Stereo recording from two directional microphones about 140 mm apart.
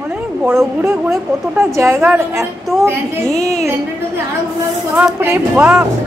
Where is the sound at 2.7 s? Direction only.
Centre (ahead or behind).